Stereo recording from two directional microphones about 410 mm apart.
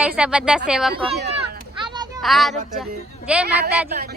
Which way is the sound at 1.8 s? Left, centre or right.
Centre.